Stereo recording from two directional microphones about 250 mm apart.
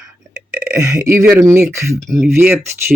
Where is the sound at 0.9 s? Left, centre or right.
Centre.